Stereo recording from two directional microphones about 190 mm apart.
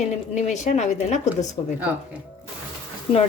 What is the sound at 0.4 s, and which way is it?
Speech, 35° left (ahead or behind).